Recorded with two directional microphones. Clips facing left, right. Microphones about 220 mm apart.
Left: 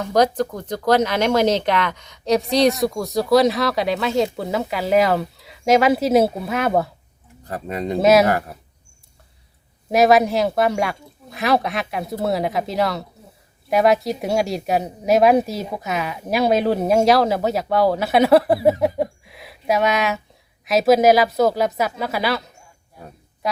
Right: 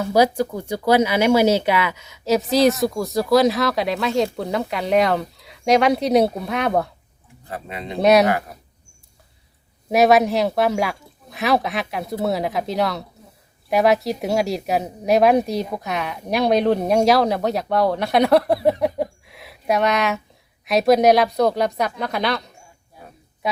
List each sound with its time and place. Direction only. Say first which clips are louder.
0.0 s speech: even; 10° right (ahead or behind)
7.4 s speech: left 6 dB; 40° left (ahead or behind)
7.9 s speech: left 1 dB; centre (ahead or behind)
9.9 s speech: even; centre (ahead or behind)